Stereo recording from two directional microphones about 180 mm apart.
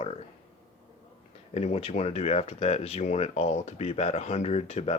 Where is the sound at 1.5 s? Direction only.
35° left (ahead or behind).